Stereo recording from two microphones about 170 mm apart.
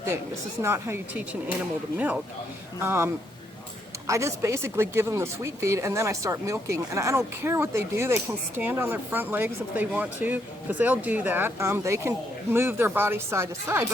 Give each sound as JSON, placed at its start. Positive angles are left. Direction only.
{"t": 0.6, "sound": "speech", "side_deg": -15}
{"t": 2.8, "sound": "speech", "side_deg": -15}